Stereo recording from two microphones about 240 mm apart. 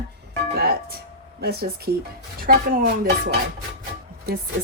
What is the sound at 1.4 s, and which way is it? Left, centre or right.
Speech, right.